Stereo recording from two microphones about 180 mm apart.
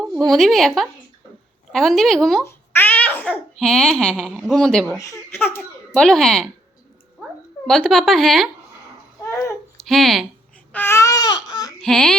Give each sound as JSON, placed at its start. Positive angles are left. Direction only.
{"t": 0.0, "sound": "a woman's voice", "side_deg": 0}
{"t": 1.7, "sound": "speech", "side_deg": 0}
{"t": 2.4, "sound": "babbling", "side_deg": 10}
{"t": 4.4, "sound": "speech", "side_deg": 5}
{"t": 4.9, "sound": "speech", "side_deg": 15}
{"t": 7.7, "sound": "speech", "side_deg": 5}
{"t": 9.2, "sound": "babbling", "side_deg": 15}
{"t": 9.8, "sound": "speech", "side_deg": 0}
{"t": 10.7, "sound": "babbling", "side_deg": 10}
{"t": 11.8, "sound": "speech", "side_deg": 0}